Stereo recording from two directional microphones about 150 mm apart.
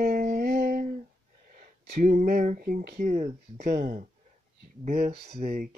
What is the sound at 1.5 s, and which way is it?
Speech, 65° right (ahead or behind).